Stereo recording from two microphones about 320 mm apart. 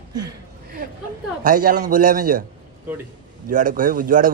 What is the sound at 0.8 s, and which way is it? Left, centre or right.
A man's voice, right.